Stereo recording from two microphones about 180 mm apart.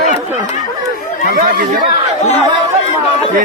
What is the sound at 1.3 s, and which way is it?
Speech, 50° right (ahead or behind).